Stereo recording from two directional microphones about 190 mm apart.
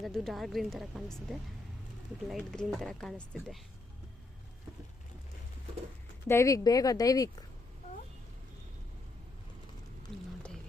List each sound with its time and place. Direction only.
0.0 s speech: centre (ahead or behind)
6.2 s a woman's voice: 15° left (ahead or behind)